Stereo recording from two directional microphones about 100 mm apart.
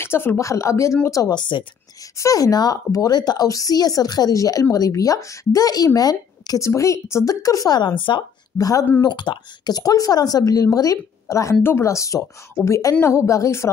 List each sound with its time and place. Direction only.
0.0 s speech: 25° left (ahead or behind)
1.3 s speech: 50° left (ahead or behind)
2.1 s speech: 35° left (ahead or behind); by 8.2 s 55° left (ahead or behind)
8.5 s speech: 35° left (ahead or behind)
9.0 s speech: 50° left (ahead or behind); by 13.7 s 30° left (ahead or behind)